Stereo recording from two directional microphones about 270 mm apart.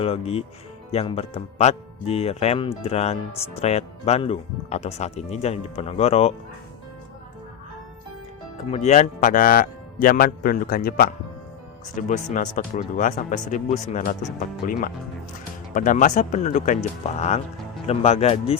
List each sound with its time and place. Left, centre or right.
0.0 s speech: left
8.7 s a man's voice: left